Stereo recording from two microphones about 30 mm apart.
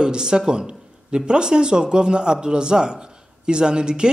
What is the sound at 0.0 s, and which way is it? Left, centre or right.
Speech, right.